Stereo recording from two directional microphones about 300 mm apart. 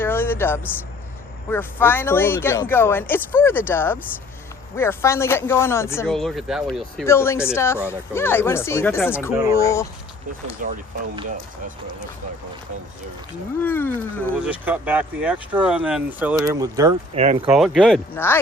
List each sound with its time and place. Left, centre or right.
0.0 s a sound: centre
1.5 s speech: centre
10.6 s speech: right
13.7 s speech: centre
14.6 s speech: centre
17.5 s speech: centre